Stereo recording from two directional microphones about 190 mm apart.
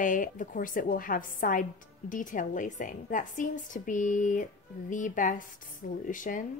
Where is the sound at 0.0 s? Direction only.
45° left (ahead or behind).